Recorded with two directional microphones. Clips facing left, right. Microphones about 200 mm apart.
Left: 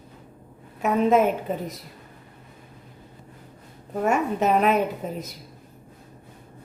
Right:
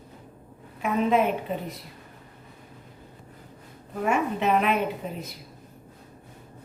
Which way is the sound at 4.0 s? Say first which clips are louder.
Left 3 dB; 45° left (ahead or behind).